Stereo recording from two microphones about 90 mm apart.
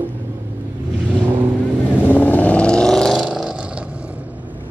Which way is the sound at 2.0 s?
20° left (ahead or behind).